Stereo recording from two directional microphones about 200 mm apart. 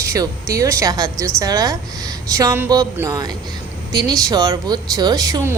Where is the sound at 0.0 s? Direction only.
15° right (ahead or behind).